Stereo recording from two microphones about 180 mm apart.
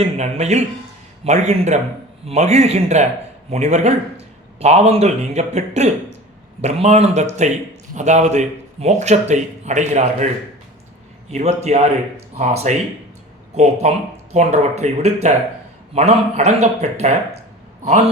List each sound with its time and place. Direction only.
0.0 s a man's voice: 35° right (ahead or behind)
11.3 s a man's voice: 40° right (ahead or behind)